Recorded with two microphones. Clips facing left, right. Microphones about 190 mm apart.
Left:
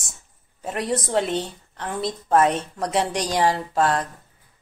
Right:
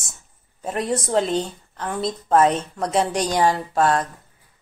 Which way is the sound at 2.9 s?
45° right (ahead or behind).